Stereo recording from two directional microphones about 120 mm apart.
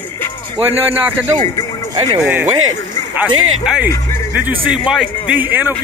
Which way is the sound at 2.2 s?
15° right (ahead or behind).